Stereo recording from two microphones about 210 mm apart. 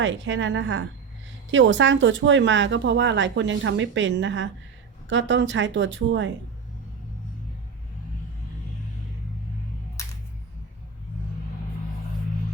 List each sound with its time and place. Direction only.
0.0 s speech: 60° right (ahead or behind)